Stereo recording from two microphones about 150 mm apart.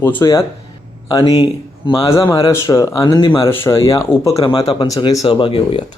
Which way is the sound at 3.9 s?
20° left (ahead or behind).